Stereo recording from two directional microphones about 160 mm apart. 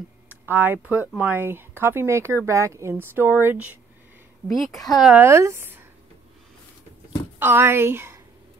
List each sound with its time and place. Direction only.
0.3 s speech: 10° right (ahead or behind)
4.5 s speech: centre (ahead or behind)
5.2 s speech: 15° right (ahead or behind)
7.3 s a woman's voice: 15° right (ahead or behind)